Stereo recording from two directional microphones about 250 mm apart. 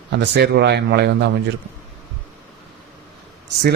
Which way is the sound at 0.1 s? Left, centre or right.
Right.